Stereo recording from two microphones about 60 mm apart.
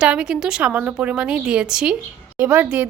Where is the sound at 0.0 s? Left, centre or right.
Centre.